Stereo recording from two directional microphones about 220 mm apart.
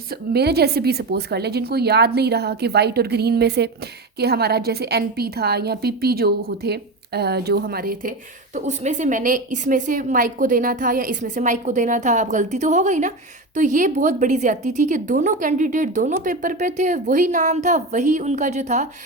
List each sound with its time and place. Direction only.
0.1 s a woman's voice: 45° right (ahead or behind); by 18.9 s 30° right (ahead or behind)